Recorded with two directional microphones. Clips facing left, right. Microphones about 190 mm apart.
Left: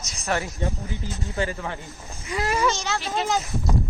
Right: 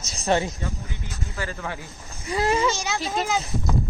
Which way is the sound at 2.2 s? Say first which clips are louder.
Right 2 dB; 30° right (ahead or behind).